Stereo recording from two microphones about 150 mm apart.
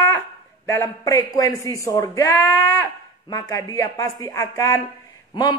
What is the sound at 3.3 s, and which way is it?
Speech, 25° left (ahead or behind).